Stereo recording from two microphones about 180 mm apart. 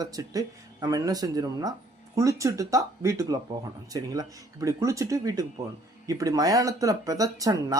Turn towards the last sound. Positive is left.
turn(degrees=-20)  # may be behind; listen again after turning